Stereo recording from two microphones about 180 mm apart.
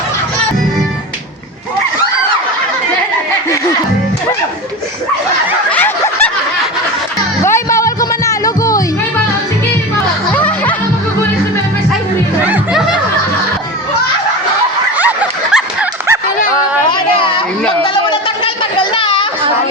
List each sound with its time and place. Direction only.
5.7 s snicker: 10° left (ahead or behind)
7.4 s music: 15° left (ahead or behind)
10.3 s music: 10° left (ahead or behind)
12.5 s music: 5° right (ahead or behind)
14.9 s a sound: 10° right (ahead or behind)
16.9 s a sound: 30° left (ahead or behind)